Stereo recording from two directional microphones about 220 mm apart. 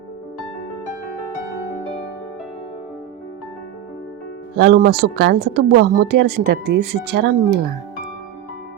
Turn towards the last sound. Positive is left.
turn(degrees=-45)  # may be behind; listen again after turning